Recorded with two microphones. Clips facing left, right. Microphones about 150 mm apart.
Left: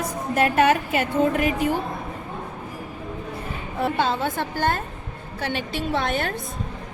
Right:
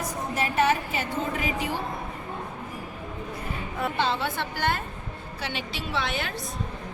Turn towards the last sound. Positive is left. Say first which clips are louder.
# left 6 dB
turn(degrees=50)  # may be behind; listen again after turning